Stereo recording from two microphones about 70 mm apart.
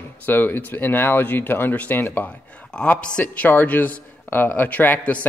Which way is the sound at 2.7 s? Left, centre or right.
Centre.